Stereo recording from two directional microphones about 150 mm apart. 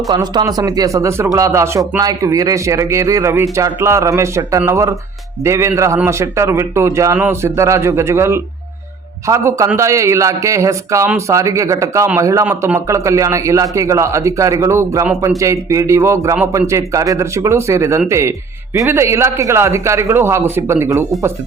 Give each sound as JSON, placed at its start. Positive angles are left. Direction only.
{"t": 0.1, "sound": "a man's voice", "side_deg": -30}